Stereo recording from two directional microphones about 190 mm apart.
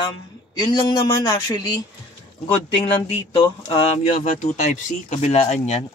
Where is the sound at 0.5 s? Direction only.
20° left (ahead or behind).